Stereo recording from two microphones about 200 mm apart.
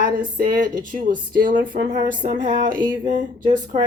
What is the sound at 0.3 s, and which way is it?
Speech, 40° right (ahead or behind).